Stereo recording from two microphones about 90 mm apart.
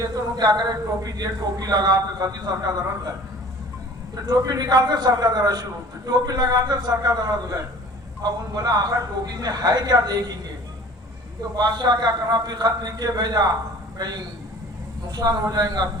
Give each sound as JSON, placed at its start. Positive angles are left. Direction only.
{"t": 0.0, "sound": "a man's voice", "side_deg": -45}
{"t": 11.5, "sound": "a man's voice", "side_deg": -50}
{"t": 15.1, "sound": "a man's voice", "side_deg": -45}